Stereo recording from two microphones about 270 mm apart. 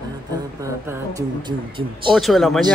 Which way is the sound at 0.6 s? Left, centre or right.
Centre.